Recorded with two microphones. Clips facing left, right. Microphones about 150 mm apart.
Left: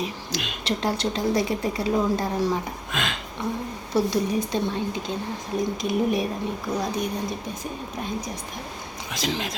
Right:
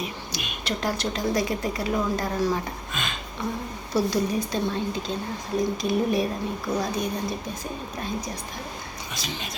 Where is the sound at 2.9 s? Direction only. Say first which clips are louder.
Left 5 dB; 90° left.